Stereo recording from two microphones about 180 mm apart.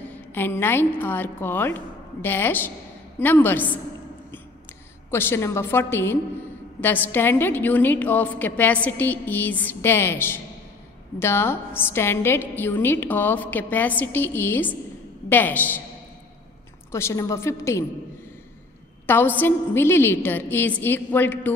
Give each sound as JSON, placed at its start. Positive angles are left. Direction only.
{"t": 0.1, "sound": "a woman's voice", "side_deg": 10}
{"t": 5.1, "sound": "a woman's voice", "side_deg": 15}
{"t": 16.9, "sound": "a woman's voice", "side_deg": 15}
{"t": 19.0, "sound": "a woman's voice", "side_deg": 10}